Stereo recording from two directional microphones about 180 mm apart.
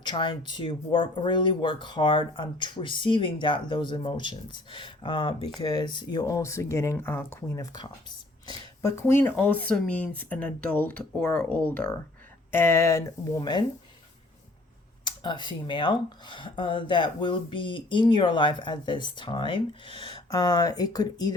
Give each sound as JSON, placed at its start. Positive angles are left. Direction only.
{"t": 0.0, "sound": "speech", "side_deg": 25}
{"t": 15.0, "sound": "speech", "side_deg": 25}